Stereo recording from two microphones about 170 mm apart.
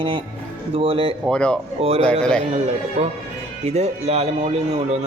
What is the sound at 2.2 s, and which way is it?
Speech, 5° left (ahead or behind).